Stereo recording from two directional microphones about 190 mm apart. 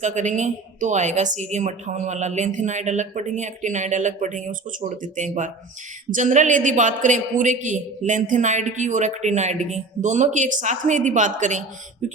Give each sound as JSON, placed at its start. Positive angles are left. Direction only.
{"t": 0.0, "sound": "a man's voice", "side_deg": -40}